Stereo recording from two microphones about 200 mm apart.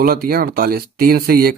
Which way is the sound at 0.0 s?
50° right (ahead or behind).